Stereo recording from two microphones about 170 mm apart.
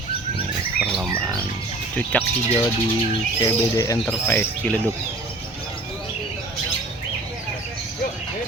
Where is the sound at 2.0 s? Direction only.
10° left (ahead or behind).